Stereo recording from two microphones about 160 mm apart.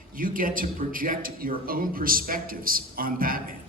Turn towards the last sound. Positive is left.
turn(degrees=-65)  # may be behind; listen again after turning